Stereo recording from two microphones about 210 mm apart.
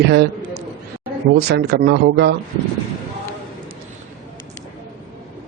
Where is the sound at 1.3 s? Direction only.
50° right (ahead or behind).